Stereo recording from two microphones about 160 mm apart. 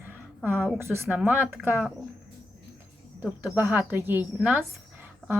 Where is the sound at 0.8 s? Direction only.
15° right (ahead or behind).